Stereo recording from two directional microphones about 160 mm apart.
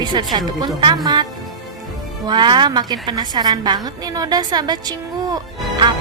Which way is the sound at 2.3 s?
30° right (ahead or behind).